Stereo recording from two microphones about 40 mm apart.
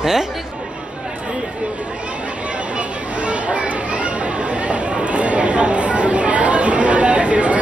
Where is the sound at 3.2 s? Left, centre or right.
Right.